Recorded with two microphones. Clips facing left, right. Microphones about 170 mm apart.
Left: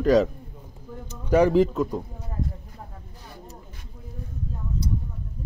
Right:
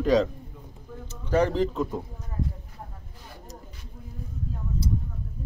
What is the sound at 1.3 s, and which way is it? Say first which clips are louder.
Speech: left 5 dB; 10° left (ahead or behind).